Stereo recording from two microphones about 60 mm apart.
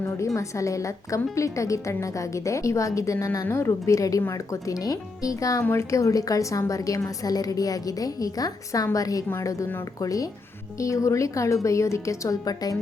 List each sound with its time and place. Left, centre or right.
0.3 s a woman's voice: left
9.4 s a woman's voice: left
10.0 s a woman's voice: left
10.8 s a woman's voice: left